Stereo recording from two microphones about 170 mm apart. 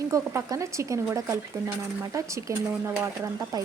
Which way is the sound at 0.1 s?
15° right (ahead or behind).